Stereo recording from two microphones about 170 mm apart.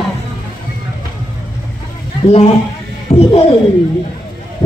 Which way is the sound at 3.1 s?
40° left (ahead or behind).